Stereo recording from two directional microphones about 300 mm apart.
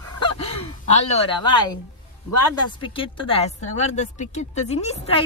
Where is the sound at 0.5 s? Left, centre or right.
Centre.